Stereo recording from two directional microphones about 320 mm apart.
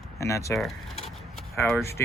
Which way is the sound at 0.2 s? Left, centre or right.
Centre.